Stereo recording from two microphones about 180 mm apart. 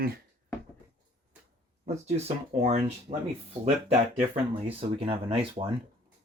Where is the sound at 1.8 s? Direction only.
40° right (ahead or behind).